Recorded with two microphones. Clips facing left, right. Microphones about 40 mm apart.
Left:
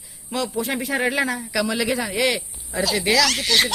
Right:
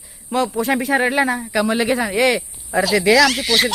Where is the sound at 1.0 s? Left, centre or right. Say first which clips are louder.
Right 4 dB; right.